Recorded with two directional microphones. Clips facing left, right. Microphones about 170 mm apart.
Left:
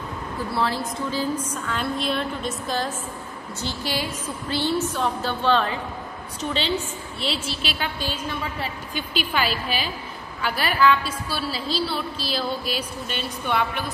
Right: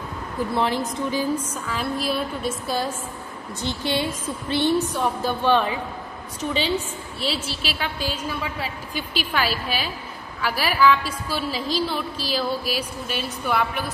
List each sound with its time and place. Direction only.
0.6 s a woman's voice: 15° right (ahead or behind)
3.6 s a woman's voice: 25° right (ahead or behind)
7.2 s a woman's voice: 5° right (ahead or behind)